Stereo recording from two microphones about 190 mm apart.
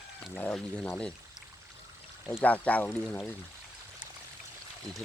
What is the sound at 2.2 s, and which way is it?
Speech, 5° left (ahead or behind).